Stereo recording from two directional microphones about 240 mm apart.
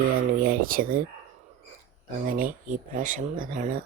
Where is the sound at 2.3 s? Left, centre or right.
Right.